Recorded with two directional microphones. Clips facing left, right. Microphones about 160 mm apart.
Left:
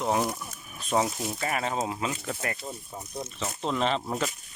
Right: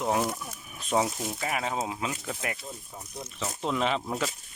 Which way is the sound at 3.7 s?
5° right (ahead or behind).